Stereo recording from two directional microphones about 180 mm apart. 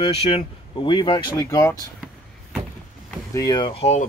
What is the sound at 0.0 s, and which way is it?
Speech, 30° left (ahead or behind).